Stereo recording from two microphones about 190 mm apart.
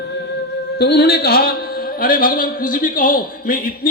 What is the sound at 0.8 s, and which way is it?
A man's voice, 60° left (ahead or behind).